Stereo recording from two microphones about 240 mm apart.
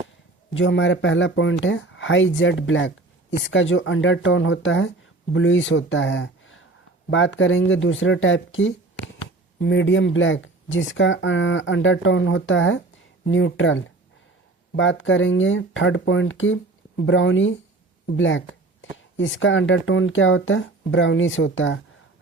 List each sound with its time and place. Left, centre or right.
0.5 s speech: left
18.0 s a sound: left
18.9 s speech: left